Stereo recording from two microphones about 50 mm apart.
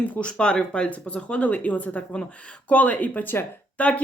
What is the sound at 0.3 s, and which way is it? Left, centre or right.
Speech, centre.